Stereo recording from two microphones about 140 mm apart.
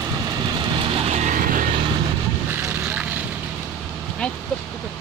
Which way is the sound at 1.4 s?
75° right (ahead or behind).